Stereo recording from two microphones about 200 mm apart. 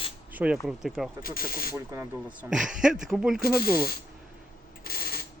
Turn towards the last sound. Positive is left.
turn(degrees=50)  # may be behind; listen again after turning